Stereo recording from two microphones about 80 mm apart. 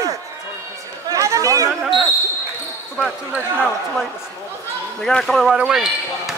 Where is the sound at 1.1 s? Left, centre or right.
Right.